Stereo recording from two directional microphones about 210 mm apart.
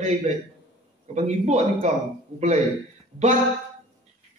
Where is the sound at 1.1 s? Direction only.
30° right (ahead or behind).